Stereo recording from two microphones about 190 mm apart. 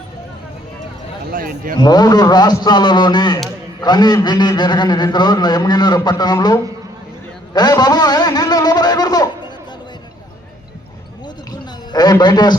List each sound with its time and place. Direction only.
1.3 s speech: 50° right (ahead or behind)
1.8 s a man's voice: 20° left (ahead or behind)
11.9 s a man's voice: 20° left (ahead or behind)